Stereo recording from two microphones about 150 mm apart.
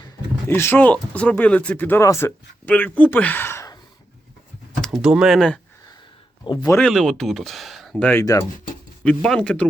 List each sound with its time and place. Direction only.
0.4 s speech: 15° left (ahead or behind)
4.8 s speech: centre (ahead or behind)
6.4 s speech: 30° left (ahead or behind)
6.8 s speech: centre (ahead or behind)
8.2 s speech: 25° left (ahead or behind)
9.0 s speech: 5° left (ahead or behind)